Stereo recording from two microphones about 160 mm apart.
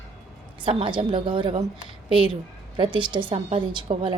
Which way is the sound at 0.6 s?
30° right (ahead or behind).